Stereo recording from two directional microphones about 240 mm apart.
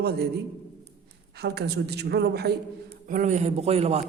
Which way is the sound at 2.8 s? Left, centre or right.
Right.